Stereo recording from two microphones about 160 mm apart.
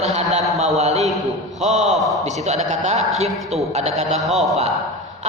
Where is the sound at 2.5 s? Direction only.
45° right (ahead or behind).